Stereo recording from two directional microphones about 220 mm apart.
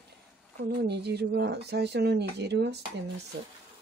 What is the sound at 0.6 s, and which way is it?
Speech, 50° right (ahead or behind).